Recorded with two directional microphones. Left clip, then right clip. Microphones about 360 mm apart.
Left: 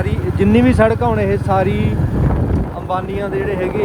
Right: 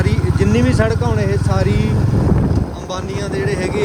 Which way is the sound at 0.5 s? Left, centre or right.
Centre.